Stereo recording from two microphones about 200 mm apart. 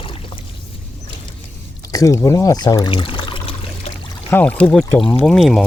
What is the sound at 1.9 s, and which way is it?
Pour, 15° left (ahead or behind).